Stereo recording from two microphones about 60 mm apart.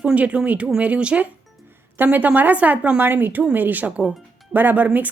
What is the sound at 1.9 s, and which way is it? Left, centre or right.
A woman's voice, right.